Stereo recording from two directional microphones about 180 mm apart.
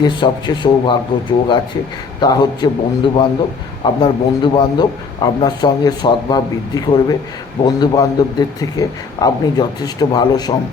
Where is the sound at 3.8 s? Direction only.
25° left (ahead or behind).